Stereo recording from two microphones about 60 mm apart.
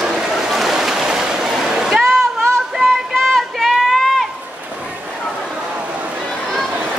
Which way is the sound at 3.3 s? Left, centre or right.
Centre.